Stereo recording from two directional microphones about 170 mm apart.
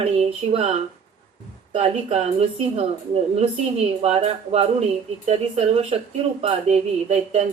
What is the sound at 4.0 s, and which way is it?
Speech, 35° right (ahead or behind).